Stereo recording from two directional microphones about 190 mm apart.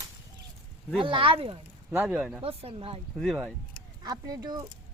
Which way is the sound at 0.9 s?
25° right (ahead or behind).